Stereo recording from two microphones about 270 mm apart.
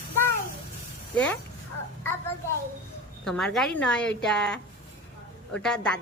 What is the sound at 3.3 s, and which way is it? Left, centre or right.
A woman's voice, centre.